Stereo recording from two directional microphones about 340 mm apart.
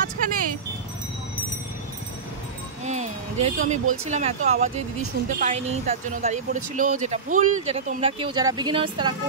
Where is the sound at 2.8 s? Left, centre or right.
Centre.